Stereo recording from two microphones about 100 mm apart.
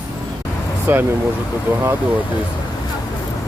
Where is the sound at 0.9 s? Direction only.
20° right (ahead or behind).